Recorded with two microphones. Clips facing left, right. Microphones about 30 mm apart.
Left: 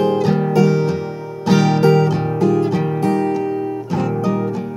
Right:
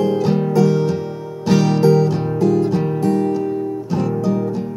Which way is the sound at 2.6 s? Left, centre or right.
Left.